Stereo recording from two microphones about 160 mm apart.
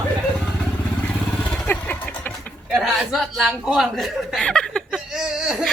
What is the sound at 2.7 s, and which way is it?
Speech, 5° right (ahead or behind).